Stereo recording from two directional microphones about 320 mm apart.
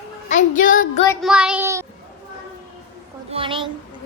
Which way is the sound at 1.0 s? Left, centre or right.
Centre.